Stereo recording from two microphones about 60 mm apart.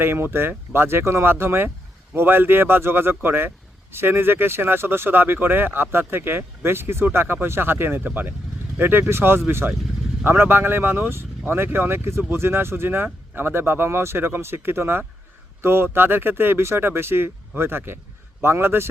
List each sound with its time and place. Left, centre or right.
0.0 s a man's voice: right